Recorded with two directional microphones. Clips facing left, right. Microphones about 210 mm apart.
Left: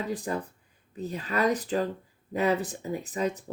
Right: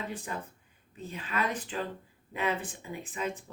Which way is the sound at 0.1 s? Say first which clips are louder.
Left 7 dB; 40° left (ahead or behind).